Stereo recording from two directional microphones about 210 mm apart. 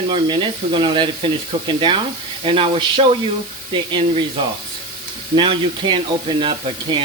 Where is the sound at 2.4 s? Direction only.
25° right (ahead or behind).